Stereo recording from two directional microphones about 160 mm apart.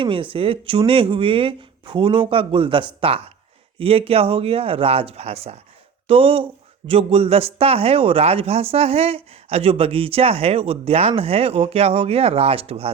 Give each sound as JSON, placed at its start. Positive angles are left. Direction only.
{"t": 0.0, "sound": "speech", "side_deg": -35}